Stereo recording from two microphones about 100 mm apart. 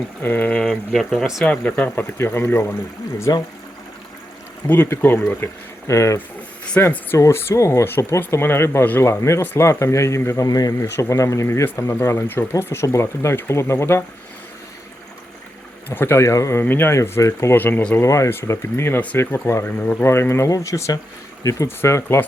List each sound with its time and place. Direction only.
0.2 s speech: 20° left (ahead or behind); by 1.5 s centre (ahead or behind)
1.5 s speech: 10° left (ahead or behind)
3.3 s speech: 40° left (ahead or behind)
4.6 s speech: 20° left (ahead or behind)
6.7 s speech: 20° left (ahead or behind)
15.9 s speech: 25° left (ahead or behind)
17.6 s speech: 20° left (ahead or behind)